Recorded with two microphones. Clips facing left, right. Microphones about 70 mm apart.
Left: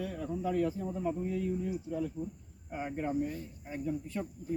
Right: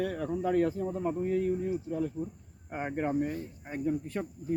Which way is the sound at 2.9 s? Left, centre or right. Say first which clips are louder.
Right 4 dB; right.